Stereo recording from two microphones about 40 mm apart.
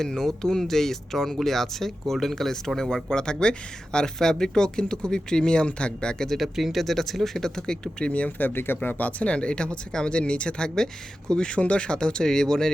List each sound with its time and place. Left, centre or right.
0.0 s speech: centre
6.2 s speech: centre
8.0 s speech: left
8.4 s speech: left; by 12.7 s centre